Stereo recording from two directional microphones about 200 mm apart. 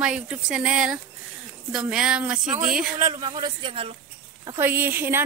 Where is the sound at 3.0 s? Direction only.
25° right (ahead or behind).